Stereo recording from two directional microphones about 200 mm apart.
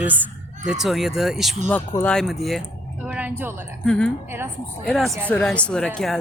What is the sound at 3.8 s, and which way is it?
Speech, 5° left (ahead or behind).